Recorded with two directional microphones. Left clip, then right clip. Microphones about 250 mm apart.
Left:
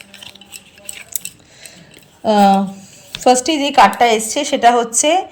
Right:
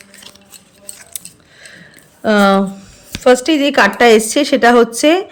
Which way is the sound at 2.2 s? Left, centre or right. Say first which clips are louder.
Even; centre.